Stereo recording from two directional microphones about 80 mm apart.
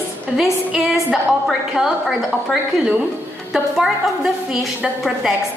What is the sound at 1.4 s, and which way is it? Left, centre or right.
A woman's voice, centre.